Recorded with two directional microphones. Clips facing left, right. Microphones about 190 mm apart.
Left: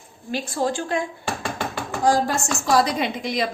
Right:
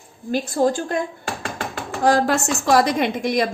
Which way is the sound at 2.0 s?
65° right (ahead or behind).